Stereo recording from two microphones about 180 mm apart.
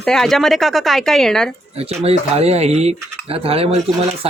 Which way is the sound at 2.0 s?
35° right (ahead or behind).